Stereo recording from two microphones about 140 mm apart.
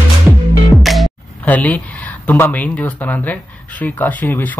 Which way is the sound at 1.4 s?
10° left (ahead or behind).